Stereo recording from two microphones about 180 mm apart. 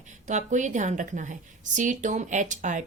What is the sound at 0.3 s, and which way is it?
A woman's voice, 45° right (ahead or behind).